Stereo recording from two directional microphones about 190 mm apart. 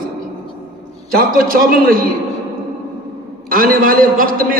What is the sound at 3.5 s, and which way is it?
A man's voice, 50° right (ahead or behind).